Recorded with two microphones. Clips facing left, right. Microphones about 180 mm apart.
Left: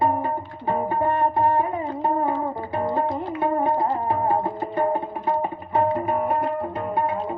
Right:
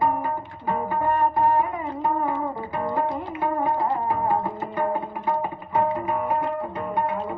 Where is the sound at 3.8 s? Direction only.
30° left (ahead or behind).